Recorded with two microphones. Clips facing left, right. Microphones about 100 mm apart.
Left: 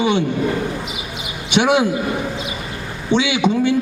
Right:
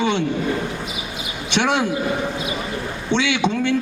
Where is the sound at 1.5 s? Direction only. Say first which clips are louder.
Left 4 dB; 10° left (ahead or behind).